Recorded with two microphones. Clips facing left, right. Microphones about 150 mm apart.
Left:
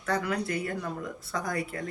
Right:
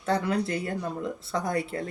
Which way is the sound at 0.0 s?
25° right (ahead or behind).